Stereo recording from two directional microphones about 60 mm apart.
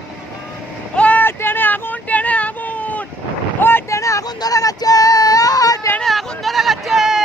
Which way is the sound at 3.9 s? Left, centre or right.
Left.